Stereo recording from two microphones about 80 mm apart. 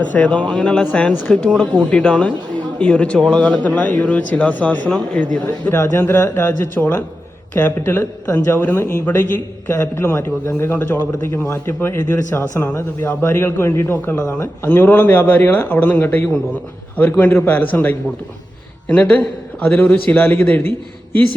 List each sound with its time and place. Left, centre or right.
0.1 s speech: centre
5.7 s a man's voice: left
14.7 s a man's voice: left